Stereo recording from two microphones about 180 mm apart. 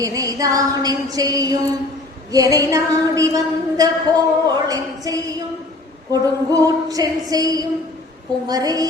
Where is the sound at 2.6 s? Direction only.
20° right (ahead or behind).